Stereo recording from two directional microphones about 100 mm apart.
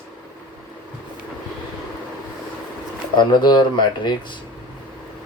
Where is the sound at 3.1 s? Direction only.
45° left (ahead or behind).